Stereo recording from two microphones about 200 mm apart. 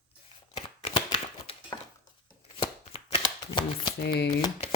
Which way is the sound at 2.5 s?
25° left (ahead or behind).